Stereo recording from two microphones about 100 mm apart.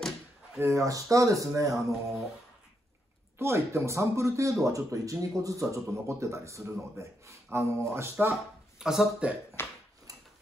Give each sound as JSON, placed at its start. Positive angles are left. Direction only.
{"t": 0.6, "sound": "speech", "side_deg": -30}
{"t": 3.3, "sound": "speech", "side_deg": -25}
{"t": 8.7, "sound": "speech", "side_deg": -5}
{"t": 9.6, "sound": "a sound", "side_deg": 25}